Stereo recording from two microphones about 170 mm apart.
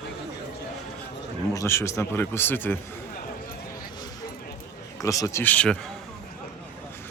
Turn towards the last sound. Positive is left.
turn(degrees=10)  # may be behind; listen again after turning